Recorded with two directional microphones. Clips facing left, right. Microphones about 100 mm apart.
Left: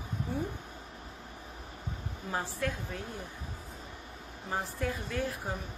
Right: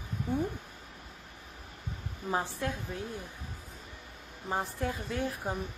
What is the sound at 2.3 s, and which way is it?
Speech, 20° right (ahead or behind).